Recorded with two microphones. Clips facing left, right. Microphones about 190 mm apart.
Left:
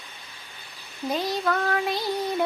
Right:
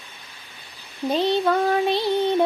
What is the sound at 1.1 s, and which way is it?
Music, 30° right (ahead or behind).